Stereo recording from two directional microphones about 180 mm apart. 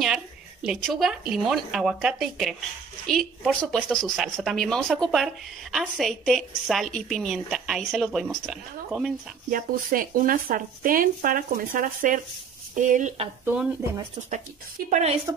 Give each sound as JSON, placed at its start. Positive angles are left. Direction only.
{"t": 0.0, "sound": "speech", "side_deg": -5}
{"t": 9.5, "sound": "speech", "side_deg": -50}
{"t": 14.9, "sound": "speech", "side_deg": -35}